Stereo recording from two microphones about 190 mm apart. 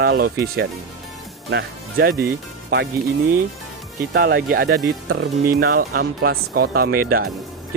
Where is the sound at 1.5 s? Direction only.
55° right (ahead or behind).